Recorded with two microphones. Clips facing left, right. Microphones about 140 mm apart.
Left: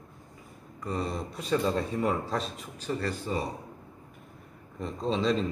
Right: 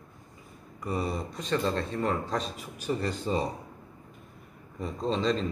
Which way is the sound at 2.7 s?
15° right (ahead or behind).